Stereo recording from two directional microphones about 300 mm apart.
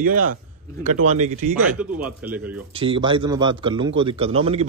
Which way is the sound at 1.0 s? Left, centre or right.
Right.